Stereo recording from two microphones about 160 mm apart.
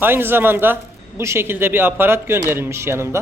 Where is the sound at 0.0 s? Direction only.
15° right (ahead or behind).